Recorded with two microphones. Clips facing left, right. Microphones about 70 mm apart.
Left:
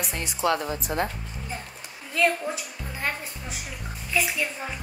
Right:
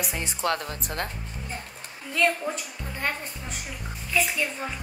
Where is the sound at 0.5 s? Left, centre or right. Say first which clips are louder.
Left 4 dB; centre.